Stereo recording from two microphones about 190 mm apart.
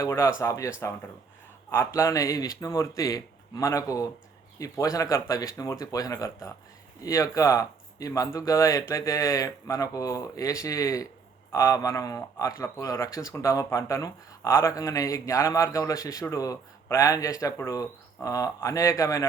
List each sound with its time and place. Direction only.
0.0 s a man's voice: 15° left (ahead or behind)
1.7 s a man's voice: 15° left (ahead or behind)